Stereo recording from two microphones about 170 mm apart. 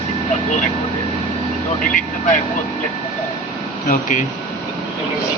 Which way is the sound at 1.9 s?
50° left (ahead or behind).